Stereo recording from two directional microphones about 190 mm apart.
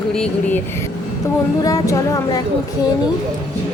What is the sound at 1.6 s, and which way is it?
Speech, 15° left (ahead or behind).